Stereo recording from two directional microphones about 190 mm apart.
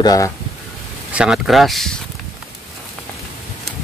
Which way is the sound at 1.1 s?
5° right (ahead or behind).